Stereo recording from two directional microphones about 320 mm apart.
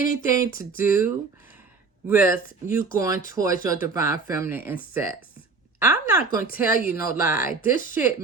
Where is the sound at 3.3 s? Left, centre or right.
Centre.